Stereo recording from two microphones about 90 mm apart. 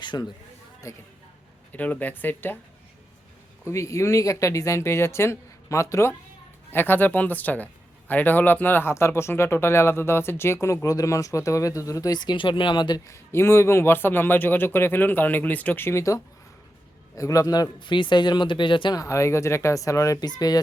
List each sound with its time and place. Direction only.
0.0 s a sound: 55° left (ahead or behind)
0.9 s speech: 35° left (ahead or behind)
1.7 s speech: 15° left (ahead or behind)
3.7 s speech: 35° left (ahead or behind); by 13.0 s 55° left (ahead or behind)
13.1 s speech: 30° left (ahead or behind)
17.7 s speech: 60° left (ahead or behind)
18.9 s speech: 35° left (ahead or behind)
20.1 s speech: 50° left (ahead or behind)